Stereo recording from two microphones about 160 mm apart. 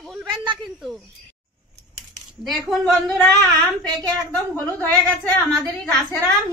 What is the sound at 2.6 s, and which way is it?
A woman's voice, centre (ahead or behind).